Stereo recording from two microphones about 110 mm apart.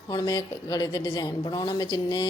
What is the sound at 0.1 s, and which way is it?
A woman's voice, 35° left (ahead or behind).